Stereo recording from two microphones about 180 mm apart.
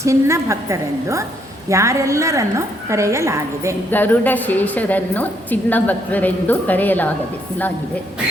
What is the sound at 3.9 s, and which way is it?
A woman's voice, 10° left (ahead or behind).